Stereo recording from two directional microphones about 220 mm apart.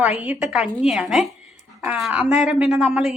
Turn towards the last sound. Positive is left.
turn(degrees=0)  # may be behind; listen again after turning